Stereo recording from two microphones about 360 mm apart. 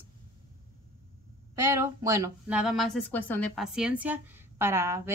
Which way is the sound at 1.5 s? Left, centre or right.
Centre.